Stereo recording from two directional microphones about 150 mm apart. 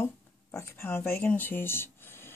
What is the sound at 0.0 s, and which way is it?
Speech, 15° left (ahead or behind).